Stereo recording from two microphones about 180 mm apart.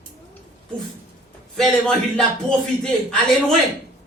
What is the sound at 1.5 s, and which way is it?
A man's voice, 5° left (ahead or behind).